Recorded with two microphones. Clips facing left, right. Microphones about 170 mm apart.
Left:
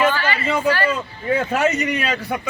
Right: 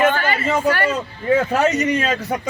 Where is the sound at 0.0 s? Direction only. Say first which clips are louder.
Right 2 dB; 50° right (ahead or behind).